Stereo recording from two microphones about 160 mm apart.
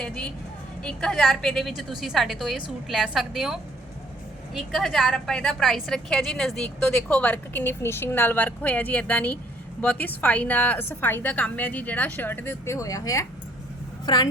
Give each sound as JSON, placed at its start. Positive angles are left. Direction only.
{"t": 0.0, "sound": "vehicle", "side_deg": 5}
{"t": 0.8, "sound": "a woman's voice", "side_deg": 5}